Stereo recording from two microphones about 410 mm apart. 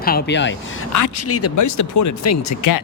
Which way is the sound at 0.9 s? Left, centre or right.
Left.